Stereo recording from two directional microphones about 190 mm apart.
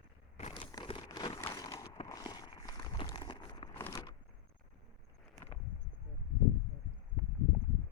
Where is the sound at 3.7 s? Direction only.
15° left (ahead or behind).